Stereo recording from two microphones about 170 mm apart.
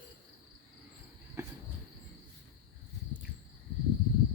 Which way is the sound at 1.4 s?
15° right (ahead or behind).